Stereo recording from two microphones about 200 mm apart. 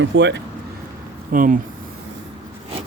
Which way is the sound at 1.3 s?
40° right (ahead or behind).